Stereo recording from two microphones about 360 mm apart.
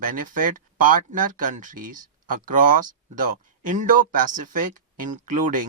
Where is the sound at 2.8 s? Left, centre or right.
Right.